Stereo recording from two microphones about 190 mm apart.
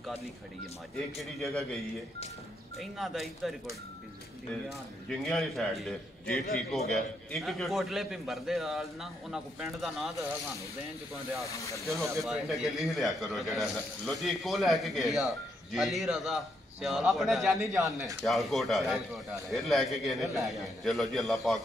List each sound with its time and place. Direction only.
1.1 s a man's voice: centre (ahead or behind)
2.8 s a man's voice: centre (ahead or behind)
4.6 s a man's voice: centre (ahead or behind)
11.8 s a man's voice: centre (ahead or behind)